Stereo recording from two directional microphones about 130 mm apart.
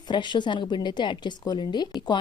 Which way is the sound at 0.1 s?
35° left (ahead or behind).